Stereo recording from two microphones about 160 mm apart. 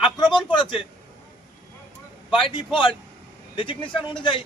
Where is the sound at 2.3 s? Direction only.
30° left (ahead or behind).